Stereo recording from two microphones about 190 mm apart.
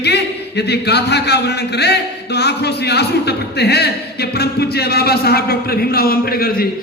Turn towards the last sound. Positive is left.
turn(degrees=50)  # may be behind; listen again after turning